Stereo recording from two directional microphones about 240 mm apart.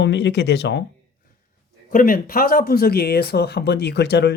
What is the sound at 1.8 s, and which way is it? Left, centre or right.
Speech, left.